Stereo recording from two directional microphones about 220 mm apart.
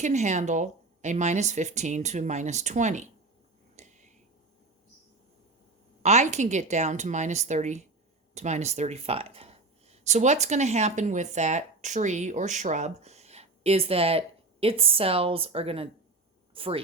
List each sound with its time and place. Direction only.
0.0 s speech: 30° right (ahead or behind)
3.8 s a sound: 30° right (ahead or behind)
6.0 s speech: 30° right (ahead or behind)